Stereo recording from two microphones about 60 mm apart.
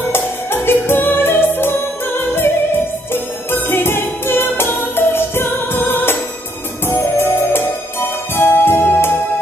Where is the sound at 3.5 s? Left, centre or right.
Left.